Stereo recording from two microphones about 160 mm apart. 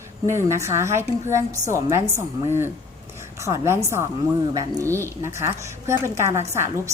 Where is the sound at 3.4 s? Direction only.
15° right (ahead or behind).